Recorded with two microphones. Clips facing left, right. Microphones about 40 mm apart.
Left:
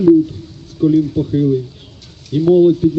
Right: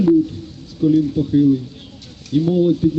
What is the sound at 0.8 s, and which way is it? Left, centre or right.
Speech, left.